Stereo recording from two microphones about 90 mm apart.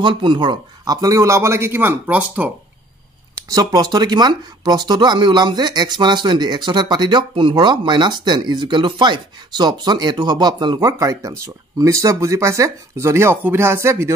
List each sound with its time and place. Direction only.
0.0 s speech: 65° right (ahead or behind)
1.0 s speech: 35° right (ahead or behind); by 2.5 s 20° right (ahead or behind)
3.4 s speech: 45° right (ahead or behind)
10.8 s speech: 40° right (ahead or behind)